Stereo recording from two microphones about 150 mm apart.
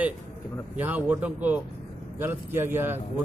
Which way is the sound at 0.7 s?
10° right (ahead or behind).